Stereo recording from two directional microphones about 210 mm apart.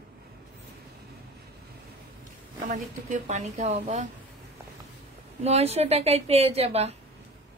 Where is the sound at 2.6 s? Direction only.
40° right (ahead or behind).